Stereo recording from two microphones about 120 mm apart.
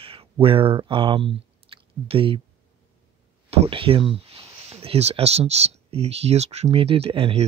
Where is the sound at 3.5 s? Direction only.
50° right (ahead or behind).